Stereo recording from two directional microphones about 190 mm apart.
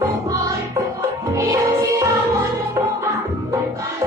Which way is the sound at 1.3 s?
15° right (ahead or behind).